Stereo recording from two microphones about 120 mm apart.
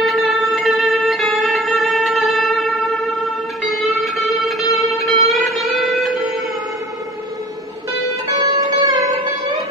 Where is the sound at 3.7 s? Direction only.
Centre (ahead or behind).